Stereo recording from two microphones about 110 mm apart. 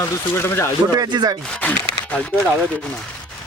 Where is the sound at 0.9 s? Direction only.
40° right (ahead or behind).